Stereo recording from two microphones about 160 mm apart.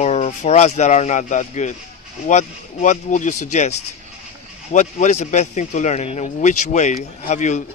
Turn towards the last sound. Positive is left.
turn(degrees=50)  # may be behind; listen again after turning